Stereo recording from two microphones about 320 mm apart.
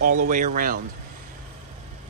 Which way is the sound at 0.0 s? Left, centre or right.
Right.